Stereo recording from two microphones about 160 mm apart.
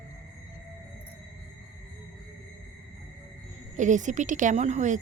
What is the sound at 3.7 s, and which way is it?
A woman's voice, 50° right (ahead or behind).